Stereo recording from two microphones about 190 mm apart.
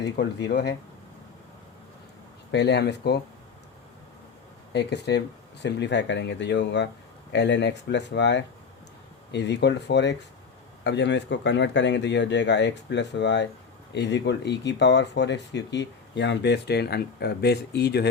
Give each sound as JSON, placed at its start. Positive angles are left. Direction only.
{"t": 0.0, "sound": "speech", "side_deg": 65}
{"t": 2.5, "sound": "speech", "side_deg": 65}
{"t": 4.7, "sound": "speech", "side_deg": 65}